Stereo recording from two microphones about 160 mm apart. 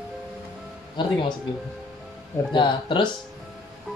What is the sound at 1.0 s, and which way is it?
Speech, 30° left (ahead or behind).